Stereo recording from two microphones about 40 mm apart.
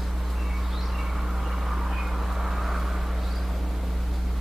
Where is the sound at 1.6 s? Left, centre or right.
Centre.